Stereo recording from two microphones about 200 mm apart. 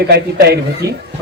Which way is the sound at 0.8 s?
15° right (ahead or behind).